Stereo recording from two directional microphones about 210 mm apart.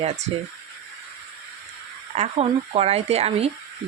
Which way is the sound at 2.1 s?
30° right (ahead or behind).